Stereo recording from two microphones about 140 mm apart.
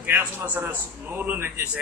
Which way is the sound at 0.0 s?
15° right (ahead or behind).